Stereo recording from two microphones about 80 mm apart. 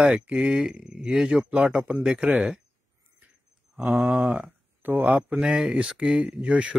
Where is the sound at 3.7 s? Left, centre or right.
Centre.